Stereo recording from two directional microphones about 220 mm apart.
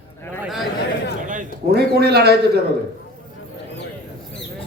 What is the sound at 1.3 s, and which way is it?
A man's voice, 40° right (ahead or behind).